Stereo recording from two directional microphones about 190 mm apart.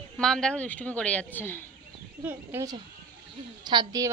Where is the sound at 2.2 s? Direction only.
10° right (ahead or behind).